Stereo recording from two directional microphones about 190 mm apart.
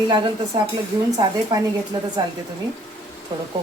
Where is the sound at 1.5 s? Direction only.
25° right (ahead or behind).